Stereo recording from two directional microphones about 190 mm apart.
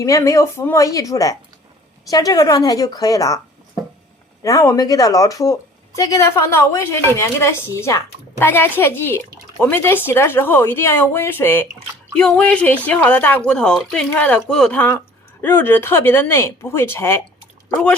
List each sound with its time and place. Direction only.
0.0 s a woman's voice: 15° left (ahead or behind)
4.4 s speech: 20° left (ahead or behind)